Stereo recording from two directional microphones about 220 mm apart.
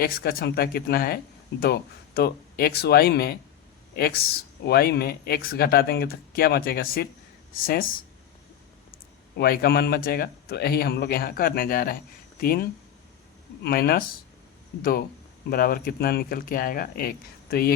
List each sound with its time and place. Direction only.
0.0 s speech: 40° left (ahead or behind)
9.4 s speech: 45° left (ahead or behind)